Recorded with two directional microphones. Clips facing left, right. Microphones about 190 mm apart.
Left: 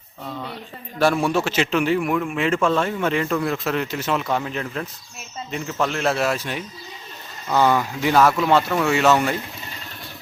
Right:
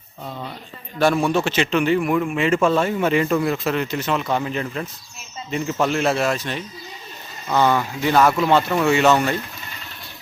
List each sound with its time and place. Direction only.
0.9 s a man's voice: 5° left (ahead or behind)